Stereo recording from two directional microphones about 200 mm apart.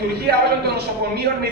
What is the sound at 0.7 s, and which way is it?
Speech, 55° right (ahead or behind).